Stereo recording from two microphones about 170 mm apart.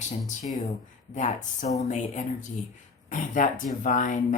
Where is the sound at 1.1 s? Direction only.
45° left (ahead or behind).